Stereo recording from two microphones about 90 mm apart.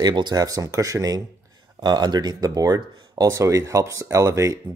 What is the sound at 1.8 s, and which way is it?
Speech, 50° right (ahead or behind).